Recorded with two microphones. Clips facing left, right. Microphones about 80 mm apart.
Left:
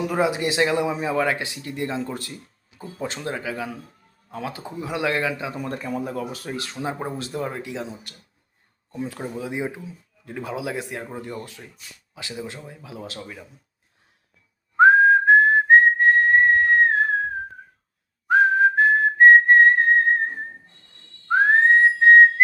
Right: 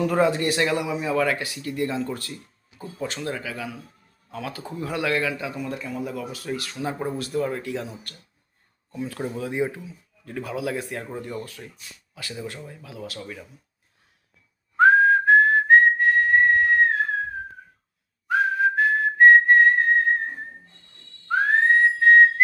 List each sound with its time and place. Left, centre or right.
0.0 s speech: centre
5.5 s speech: left
9.1 s speech: centre
12.9 s speech: left
13.2 s speech: centre
14.8 s whistling: left
18.3 s whistling: left
21.2 s whistling: left